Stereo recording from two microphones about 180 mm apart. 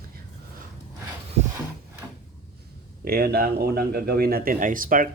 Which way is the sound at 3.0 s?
60° right (ahead or behind).